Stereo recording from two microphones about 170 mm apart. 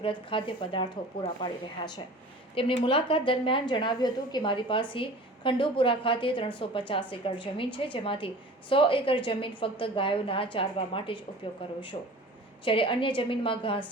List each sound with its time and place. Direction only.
0.0 s a woman's voice: 30° left (ahead or behind)